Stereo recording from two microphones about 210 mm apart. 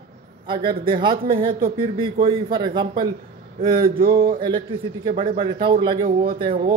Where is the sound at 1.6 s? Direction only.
25° right (ahead or behind).